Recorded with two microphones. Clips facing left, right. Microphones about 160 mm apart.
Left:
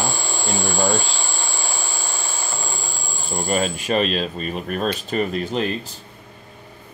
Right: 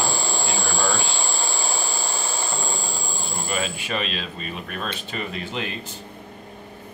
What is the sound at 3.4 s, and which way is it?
Speech, 40° left (ahead or behind).